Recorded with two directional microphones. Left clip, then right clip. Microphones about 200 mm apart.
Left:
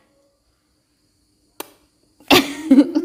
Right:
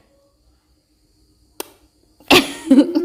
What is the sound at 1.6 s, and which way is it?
Cricket, centre (ahead or behind).